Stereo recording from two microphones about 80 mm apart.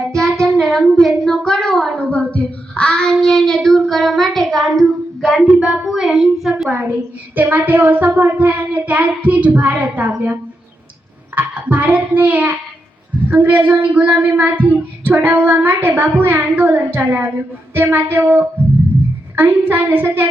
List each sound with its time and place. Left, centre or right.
0.4 s speech: centre
2.0 s child singing: centre
5.5 s a sound: centre
6.8 s speech: right
11.3 s speech: centre